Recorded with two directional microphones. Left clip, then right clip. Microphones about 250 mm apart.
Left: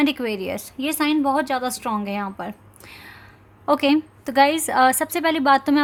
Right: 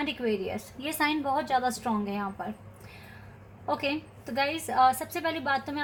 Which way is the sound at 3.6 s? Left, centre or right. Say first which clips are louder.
Left 11 dB; left.